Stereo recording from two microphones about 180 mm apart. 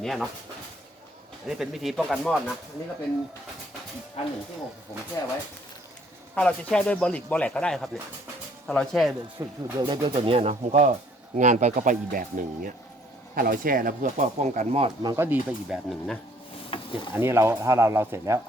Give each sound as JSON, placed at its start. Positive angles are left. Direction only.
{"t": 0.0, "sound": "speech", "side_deg": 0}
{"t": 1.5, "sound": "speech", "side_deg": 0}
{"t": 4.2, "sound": "speech", "side_deg": 35}
{"t": 5.2, "sound": "speech", "side_deg": 20}
{"t": 6.3, "sound": "speech", "side_deg": 5}
{"t": 9.4, "sound": "speech", "side_deg": -15}
{"t": 9.8, "sound": "speech", "side_deg": -30}
{"t": 13.3, "sound": "speech", "side_deg": -55}
{"t": 15.0, "sound": "speech", "side_deg": -15}
{"t": 16.6, "sound": "a sound", "side_deg": 30}
{"t": 17.2, "sound": "speech", "side_deg": -15}